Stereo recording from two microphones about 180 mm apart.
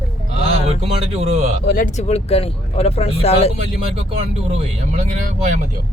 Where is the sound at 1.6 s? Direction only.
55° left (ahead or behind).